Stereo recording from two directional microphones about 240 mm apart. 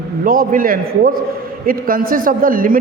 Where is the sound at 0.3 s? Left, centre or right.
Right.